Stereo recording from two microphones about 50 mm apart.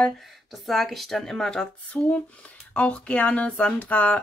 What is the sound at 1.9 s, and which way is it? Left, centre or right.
Speech, left.